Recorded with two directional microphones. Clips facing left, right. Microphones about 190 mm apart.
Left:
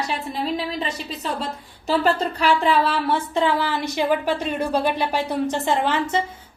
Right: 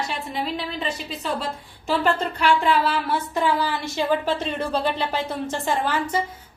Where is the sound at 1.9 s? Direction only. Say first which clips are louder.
Left 2 dB; 40° left (ahead or behind).